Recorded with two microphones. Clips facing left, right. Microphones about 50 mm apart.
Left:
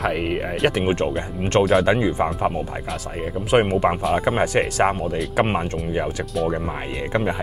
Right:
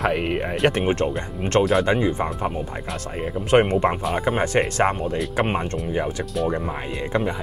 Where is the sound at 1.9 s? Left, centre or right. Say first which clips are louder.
Left 2 dB; centre.